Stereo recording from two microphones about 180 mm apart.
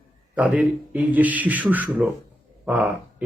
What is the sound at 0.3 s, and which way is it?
Speech, 10° right (ahead or behind).